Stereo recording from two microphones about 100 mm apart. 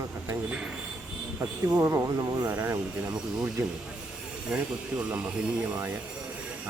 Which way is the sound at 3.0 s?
10° right (ahead or behind).